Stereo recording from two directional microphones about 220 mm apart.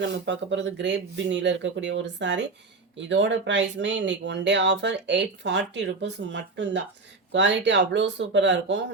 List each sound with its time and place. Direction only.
0.0 s speech: 55° right (ahead or behind)